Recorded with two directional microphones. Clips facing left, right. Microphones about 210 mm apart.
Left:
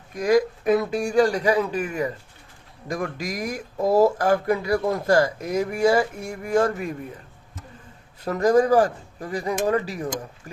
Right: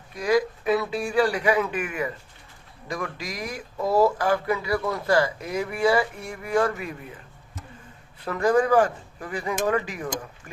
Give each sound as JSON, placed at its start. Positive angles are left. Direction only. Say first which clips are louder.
{"t": 0.1, "sound": "speech", "louder": "left 3 dB", "side_deg": 45}
{"t": 8.2, "sound": "speech", "louder": "left 3 dB", "side_deg": 40}